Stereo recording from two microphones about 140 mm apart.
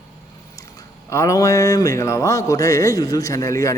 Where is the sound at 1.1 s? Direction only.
20° left (ahead or behind).